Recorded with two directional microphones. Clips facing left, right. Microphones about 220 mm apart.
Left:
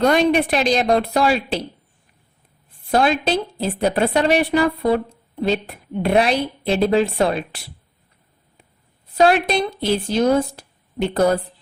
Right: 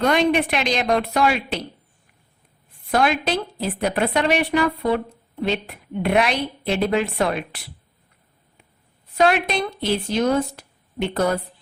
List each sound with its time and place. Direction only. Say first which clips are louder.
0.0 s a woman's voice: left 3 dB; 35° left (ahead or behind)
2.9 s a woman's voice: left 3 dB; 30° left (ahead or behind)
9.1 s a woman's voice: left 3 dB; 35° left (ahead or behind)